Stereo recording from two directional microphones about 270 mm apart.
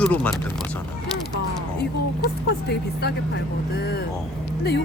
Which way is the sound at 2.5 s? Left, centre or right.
Left.